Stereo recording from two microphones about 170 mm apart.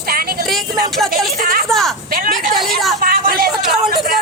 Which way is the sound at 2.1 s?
55° right (ahead or behind).